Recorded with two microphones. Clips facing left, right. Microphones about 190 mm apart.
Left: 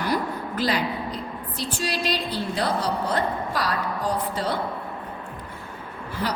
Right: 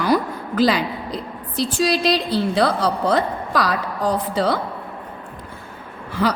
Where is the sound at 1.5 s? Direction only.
90° right.